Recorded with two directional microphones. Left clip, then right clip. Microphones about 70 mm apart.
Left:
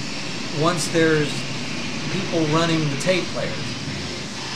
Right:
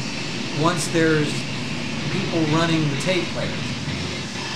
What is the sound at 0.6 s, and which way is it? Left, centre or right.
Speech, centre.